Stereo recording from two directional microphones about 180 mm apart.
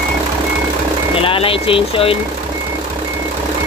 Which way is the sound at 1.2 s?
30° left (ahead or behind).